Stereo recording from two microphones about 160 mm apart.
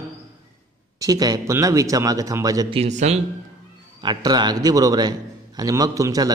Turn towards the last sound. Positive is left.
turn(degrees=-20)  # may be behind; listen again after turning